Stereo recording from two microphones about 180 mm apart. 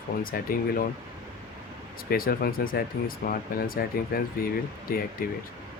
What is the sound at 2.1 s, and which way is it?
Speech, 55° left (ahead or behind).